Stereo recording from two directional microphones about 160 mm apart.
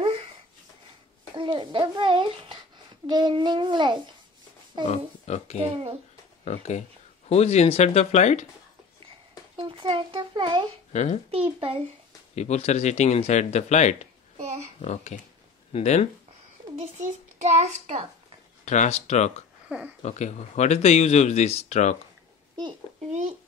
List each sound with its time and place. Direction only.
1.3 s a child's voice: 30° right (ahead or behind)
4.8 s speech: 40° left (ahead or behind)
9.6 s a child's voice: 30° right (ahead or behind)
10.9 s a child's voice: 45° left (ahead or behind)
11.3 s a child's voice: 35° right (ahead or behind)
12.4 s speech: 45° left (ahead or behind)
14.4 s a child's voice: 45° right (ahead or behind)
14.8 s speech: 45° left (ahead or behind)
16.8 s a child's voice: 50° right (ahead or behind)
18.7 s speech: 45° left (ahead or behind)